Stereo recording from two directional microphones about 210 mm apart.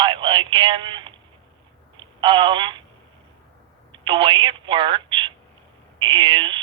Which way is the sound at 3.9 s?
25° right (ahead or behind).